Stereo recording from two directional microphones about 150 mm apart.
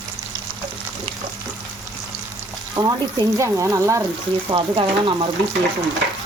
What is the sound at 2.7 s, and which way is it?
Speech, 25° right (ahead or behind).